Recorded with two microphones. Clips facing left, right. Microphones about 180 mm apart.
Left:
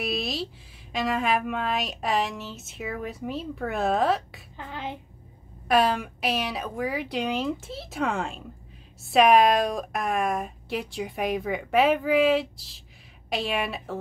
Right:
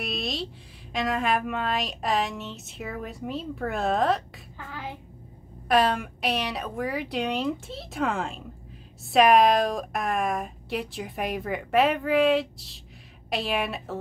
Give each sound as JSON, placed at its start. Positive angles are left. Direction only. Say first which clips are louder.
{"t": 0.0, "sound": "a sound", "louder": "left 2 dB", "side_deg": 0}
{"t": 0.9, "sound": "a woman's voice", "louder": "even", "side_deg": 0}
{"t": 4.6, "sound": "child singing", "louder": "left 3 dB", "side_deg": 20}
{"t": 5.7, "sound": "a woman's voice", "louder": "even", "side_deg": 0}